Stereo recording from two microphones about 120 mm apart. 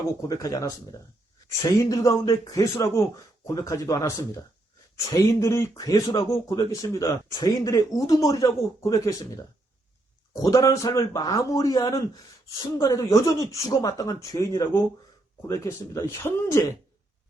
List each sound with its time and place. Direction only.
0.2 s speech: 30° left (ahead or behind)
1.8 s speech: 30° left (ahead or behind)